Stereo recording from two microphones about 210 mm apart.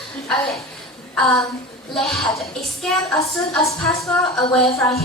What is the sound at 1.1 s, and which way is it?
A woman's voice, 5° left (ahead or behind).